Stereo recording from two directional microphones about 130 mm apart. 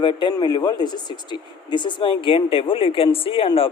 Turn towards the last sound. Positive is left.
turn(degrees=45)  # may be behind; listen again after turning